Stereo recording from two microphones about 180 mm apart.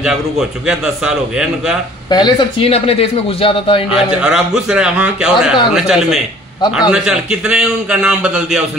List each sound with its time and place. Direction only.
0.0 s a man's voice: 5° right (ahead or behind)
2.0 s a man's voice: 25° left (ahead or behind)
3.9 s a man's voice: 5° right (ahead or behind)